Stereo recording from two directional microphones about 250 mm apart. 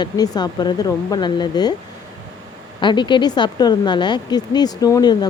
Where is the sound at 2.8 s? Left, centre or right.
Centre.